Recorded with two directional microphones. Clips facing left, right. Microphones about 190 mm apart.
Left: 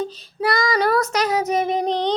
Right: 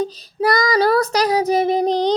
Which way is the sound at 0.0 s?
40° right (ahead or behind).